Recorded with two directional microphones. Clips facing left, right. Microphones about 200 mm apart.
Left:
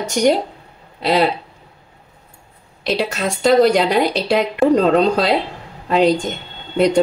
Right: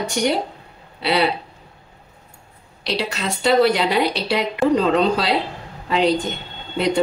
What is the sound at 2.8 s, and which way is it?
A woman's voice, 50° left (ahead or behind).